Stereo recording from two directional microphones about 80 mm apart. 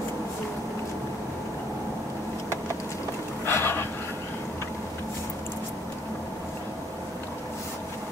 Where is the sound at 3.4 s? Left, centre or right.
Left.